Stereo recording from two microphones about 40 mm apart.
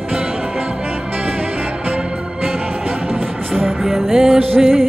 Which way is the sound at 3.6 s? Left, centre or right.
Centre.